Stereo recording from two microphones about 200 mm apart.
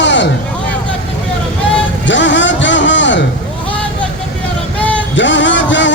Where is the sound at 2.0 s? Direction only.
65° left (ahead or behind).